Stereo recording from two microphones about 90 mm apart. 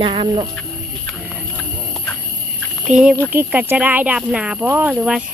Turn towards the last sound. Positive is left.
turn(degrees=-20)  # may be behind; listen again after turning